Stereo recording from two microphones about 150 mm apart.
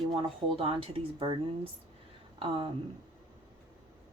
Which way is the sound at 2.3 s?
35° right (ahead or behind).